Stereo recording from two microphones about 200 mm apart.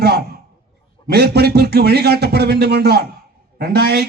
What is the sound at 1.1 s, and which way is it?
A man's voice, 55° right (ahead or behind).